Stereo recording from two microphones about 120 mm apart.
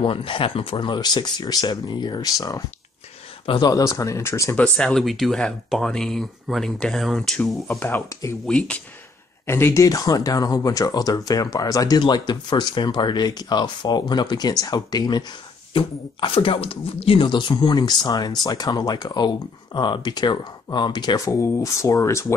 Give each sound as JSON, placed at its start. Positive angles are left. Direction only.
{"t": 0.0, "sound": "speech", "side_deg": 45}
{"t": 3.4, "sound": "speech", "side_deg": 40}
{"t": 3.7, "sound": "speech", "side_deg": 30}
{"t": 4.6, "sound": "speech", "side_deg": 5}
{"t": 7.6, "sound": "speech", "side_deg": 15}
{"t": 8.5, "sound": "speech", "side_deg": 10}
{"t": 9.5, "sound": "speech", "side_deg": 20}
{"t": 15.7, "sound": "speech", "side_deg": 45}
{"t": 21.3, "sound": "speech", "side_deg": 25}